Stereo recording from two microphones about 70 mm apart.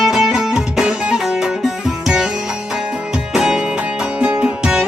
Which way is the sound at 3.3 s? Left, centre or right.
Centre.